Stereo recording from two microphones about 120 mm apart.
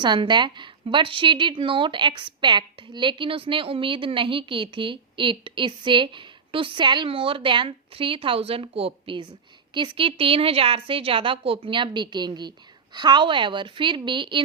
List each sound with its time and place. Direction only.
0.0 s a woman's voice: 40° right (ahead or behind)